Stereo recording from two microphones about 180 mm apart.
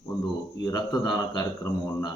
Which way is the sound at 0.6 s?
20° left (ahead or behind).